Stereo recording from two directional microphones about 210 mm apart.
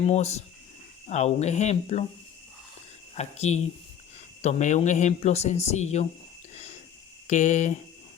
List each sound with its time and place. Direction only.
0.0 s speech: 30° left (ahead or behind)
3.2 s speech: 30° left (ahead or behind)
6.5 s a sound: 30° left (ahead or behind)
7.3 s speech: 35° left (ahead or behind)